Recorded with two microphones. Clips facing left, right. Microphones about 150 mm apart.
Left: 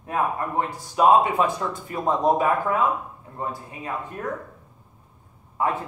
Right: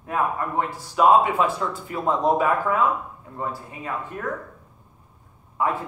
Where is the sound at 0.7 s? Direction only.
20° left (ahead or behind).